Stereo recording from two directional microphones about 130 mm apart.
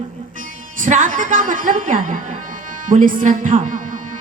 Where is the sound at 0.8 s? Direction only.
85° right.